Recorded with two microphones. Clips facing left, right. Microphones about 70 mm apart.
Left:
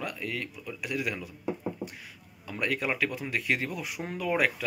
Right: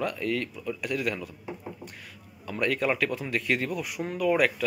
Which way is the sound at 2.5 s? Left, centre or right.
Centre.